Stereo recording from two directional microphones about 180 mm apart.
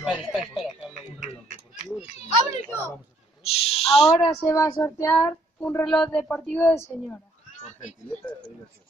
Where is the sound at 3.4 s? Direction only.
35° left (ahead or behind).